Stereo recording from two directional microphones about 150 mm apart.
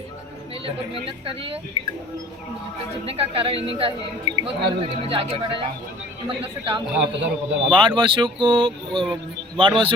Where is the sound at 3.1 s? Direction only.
40° right (ahead or behind).